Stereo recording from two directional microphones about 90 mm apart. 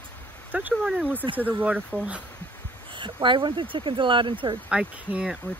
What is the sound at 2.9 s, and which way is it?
Speech, 65° right (ahead or behind).